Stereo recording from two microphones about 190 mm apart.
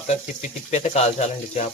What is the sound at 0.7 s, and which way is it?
Speech, 35° left (ahead or behind).